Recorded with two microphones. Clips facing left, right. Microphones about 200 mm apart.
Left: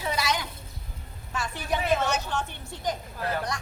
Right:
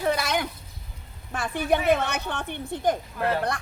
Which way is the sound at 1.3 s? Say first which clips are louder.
Right 6 dB; 55° right (ahead or behind).